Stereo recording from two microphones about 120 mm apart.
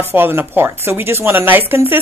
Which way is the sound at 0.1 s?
20° right (ahead or behind).